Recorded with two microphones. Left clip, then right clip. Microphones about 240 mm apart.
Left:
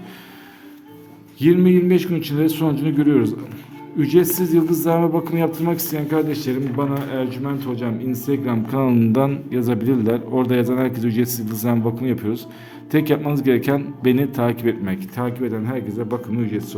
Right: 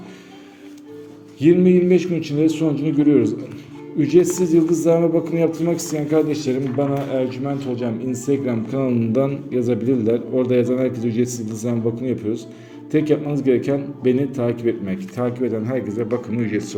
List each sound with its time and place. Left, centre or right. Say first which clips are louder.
1.4 s a man's voice: right 1 dB; centre